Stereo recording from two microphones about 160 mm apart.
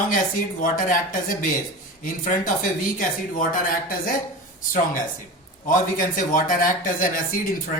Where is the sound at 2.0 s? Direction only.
55° left (ahead or behind).